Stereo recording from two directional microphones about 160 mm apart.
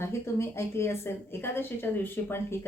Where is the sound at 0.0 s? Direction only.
15° left (ahead or behind).